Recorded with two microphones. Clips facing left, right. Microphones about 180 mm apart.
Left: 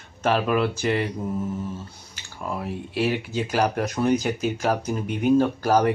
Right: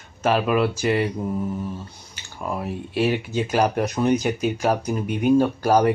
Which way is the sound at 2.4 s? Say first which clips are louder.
Right 2 dB; 15° right (ahead or behind).